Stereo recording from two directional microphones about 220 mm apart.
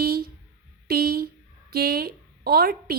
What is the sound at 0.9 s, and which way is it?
A woman's voice, 45° right (ahead or behind).